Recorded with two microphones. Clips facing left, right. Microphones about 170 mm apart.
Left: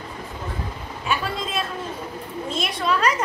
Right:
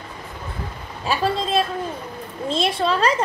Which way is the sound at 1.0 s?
30° right (ahead or behind).